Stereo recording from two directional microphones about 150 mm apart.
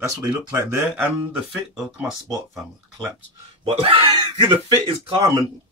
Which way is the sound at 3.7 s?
40° right (ahead or behind).